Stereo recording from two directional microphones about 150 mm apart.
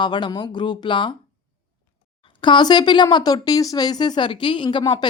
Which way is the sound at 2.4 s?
30° left (ahead or behind).